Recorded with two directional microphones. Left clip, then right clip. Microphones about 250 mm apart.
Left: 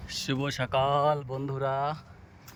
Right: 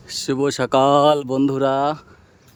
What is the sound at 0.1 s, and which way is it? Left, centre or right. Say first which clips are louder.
Speech: right 11 dB; centre.